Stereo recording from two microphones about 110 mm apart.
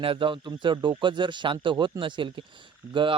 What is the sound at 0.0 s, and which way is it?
A man's voice, 50° right (ahead or behind).